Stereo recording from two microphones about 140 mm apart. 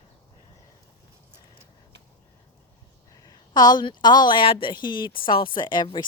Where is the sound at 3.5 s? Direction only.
30° left (ahead or behind).